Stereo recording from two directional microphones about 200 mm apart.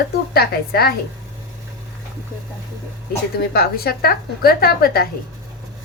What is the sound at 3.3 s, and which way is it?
A woman's voice, 50° left (ahead or behind).